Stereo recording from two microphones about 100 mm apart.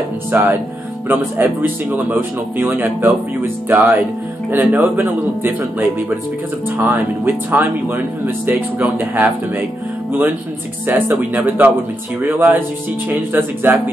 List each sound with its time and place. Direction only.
0.3 s speech: 25° right (ahead or behind)
10.9 s speech: 20° right (ahead or behind)